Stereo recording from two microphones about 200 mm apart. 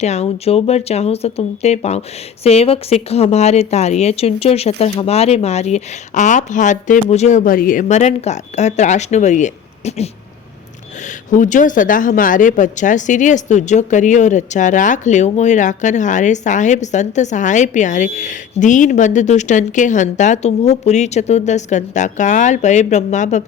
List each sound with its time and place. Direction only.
0.0 s speech: 35° left (ahead or behind)